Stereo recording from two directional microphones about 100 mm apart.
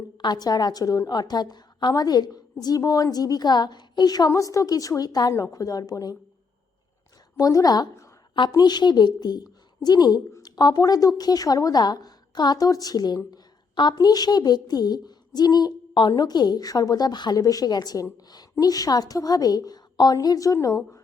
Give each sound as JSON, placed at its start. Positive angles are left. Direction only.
{"t": 0.2, "sound": "a woman's voice", "side_deg": 45}
{"t": 7.3, "sound": "a woman's voice", "side_deg": 35}